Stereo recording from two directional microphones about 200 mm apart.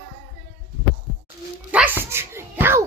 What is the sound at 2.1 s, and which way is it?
Music, 10° right (ahead or behind).